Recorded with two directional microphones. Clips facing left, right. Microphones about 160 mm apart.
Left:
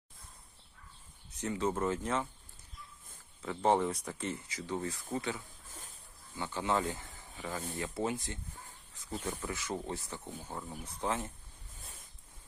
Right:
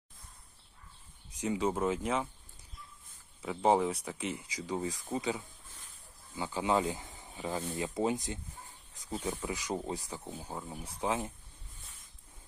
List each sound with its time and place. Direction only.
1.4 s speech: 10° right (ahead or behind)
3.4 s speech: 10° right (ahead or behind)